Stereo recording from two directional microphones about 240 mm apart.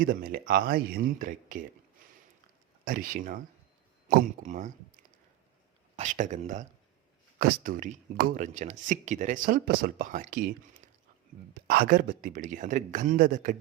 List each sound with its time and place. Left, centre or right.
0.0 s speech: right
2.8 s speech: right
6.0 s speech: right